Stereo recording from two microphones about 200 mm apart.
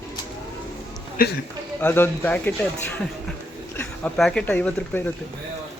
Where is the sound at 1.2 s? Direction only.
45° left (ahead or behind).